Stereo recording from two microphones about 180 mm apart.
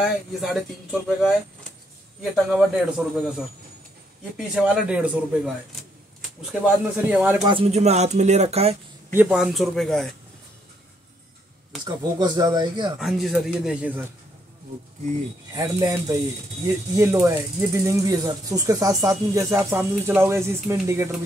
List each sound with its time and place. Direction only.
0.0 s speech: centre (ahead or behind)
2.5 s speech: 5° right (ahead or behind)
4.6 s speech: 5° right (ahead or behind)
6.6 s speech: 5° right (ahead or behind)
7.4 s speech: 30° right (ahead or behind)
9.1 s speech: 5° right (ahead or behind)
11.8 s speech: 20° right (ahead or behind)
13.0 s speech: centre (ahead or behind)
15.5 s speech: 20° right (ahead or behind)